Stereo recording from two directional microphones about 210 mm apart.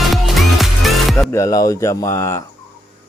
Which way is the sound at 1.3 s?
15° left (ahead or behind).